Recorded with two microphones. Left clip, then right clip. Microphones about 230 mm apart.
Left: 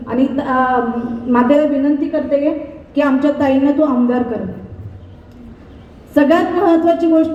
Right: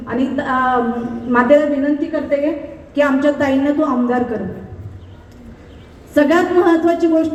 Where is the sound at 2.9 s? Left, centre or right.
Left.